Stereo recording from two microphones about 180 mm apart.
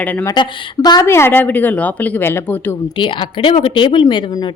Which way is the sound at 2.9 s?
30° left (ahead or behind).